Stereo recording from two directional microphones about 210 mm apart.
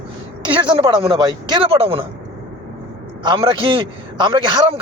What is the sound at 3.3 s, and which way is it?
Speech, 25° right (ahead or behind).